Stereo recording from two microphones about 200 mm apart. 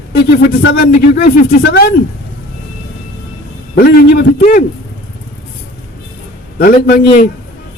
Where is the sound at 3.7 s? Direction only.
50° left (ahead or behind).